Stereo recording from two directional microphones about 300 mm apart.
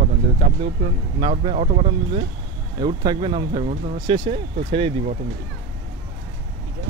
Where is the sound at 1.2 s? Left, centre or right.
Centre.